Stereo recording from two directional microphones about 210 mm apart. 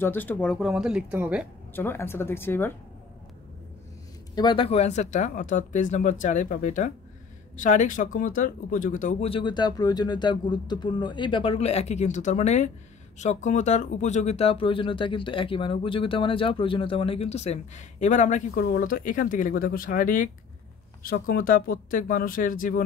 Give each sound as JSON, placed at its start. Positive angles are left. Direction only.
{"t": 0.0, "sound": "speech", "side_deg": 10}
{"t": 1.7, "sound": "speech", "side_deg": 10}
{"t": 4.4, "sound": "speech", "side_deg": 25}